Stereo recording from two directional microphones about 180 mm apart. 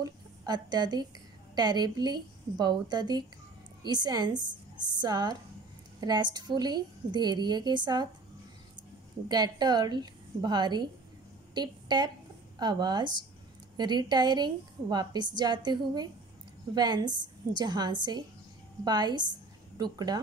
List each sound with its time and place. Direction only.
0.0 s a woman's voice: 20° right (ahead or behind)
9.3 s a woman's voice: 25° right (ahead or behind)